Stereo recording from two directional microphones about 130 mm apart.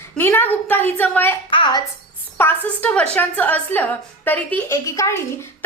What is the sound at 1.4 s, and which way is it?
Speech, 40° left (ahead or behind).